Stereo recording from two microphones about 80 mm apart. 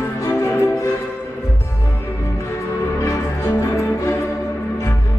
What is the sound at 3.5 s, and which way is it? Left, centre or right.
Music, left.